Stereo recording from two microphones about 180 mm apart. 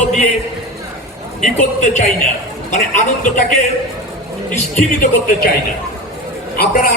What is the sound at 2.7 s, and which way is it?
Speech, 45° left (ahead or behind).